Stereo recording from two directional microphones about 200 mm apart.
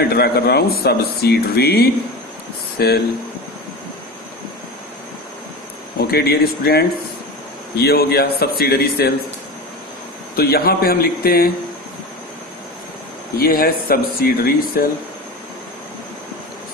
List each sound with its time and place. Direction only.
0.0 s speech: 50° left (ahead or behind)
5.9 s speech: 50° left (ahead or behind)
10.3 s speech: 50° left (ahead or behind)
13.4 s speech: 45° left (ahead or behind)